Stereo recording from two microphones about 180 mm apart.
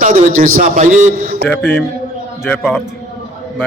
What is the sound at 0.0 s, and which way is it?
A man's voice, 45° right (ahead or behind).